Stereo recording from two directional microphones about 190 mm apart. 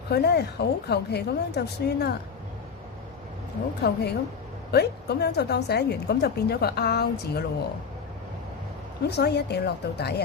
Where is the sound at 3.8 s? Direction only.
60° left (ahead or behind).